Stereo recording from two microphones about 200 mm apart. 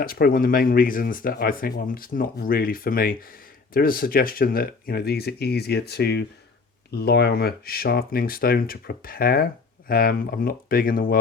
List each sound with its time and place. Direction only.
0.0 s speech: 45° left (ahead or behind)